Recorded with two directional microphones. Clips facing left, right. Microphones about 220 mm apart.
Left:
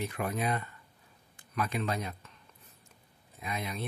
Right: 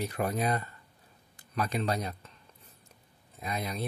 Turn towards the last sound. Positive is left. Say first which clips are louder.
# right 2 dB
turn(degrees=-40)  # may be behind; listen again after turning